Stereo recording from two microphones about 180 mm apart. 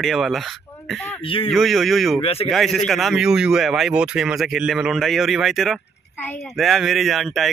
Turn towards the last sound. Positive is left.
turn(degrees=0)  # may be behind; listen again after turning